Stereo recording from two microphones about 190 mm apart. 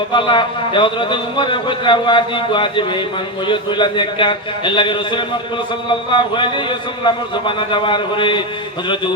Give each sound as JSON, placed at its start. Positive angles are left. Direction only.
{"t": 0.1, "sound": "a man's voice", "side_deg": 25}